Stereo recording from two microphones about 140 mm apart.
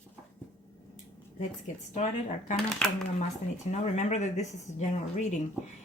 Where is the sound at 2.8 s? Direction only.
5° left (ahead or behind).